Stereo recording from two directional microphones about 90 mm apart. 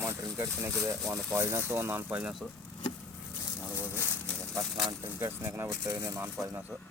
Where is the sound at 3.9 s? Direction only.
25° left (ahead or behind).